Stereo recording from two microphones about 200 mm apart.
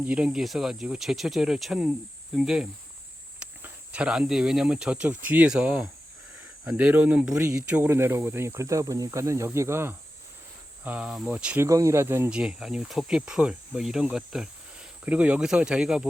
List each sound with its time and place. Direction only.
0.0 s speech: 5° right (ahead or behind)